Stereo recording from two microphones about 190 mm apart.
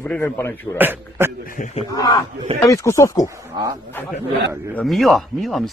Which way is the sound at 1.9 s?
20° left (ahead or behind).